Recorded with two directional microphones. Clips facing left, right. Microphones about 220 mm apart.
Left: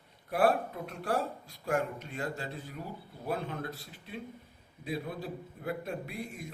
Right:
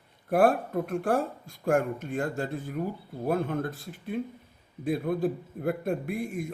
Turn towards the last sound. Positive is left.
turn(degrees=-50)  # may be behind; listen again after turning